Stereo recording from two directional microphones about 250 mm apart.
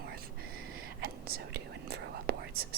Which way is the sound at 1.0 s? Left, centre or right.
Right.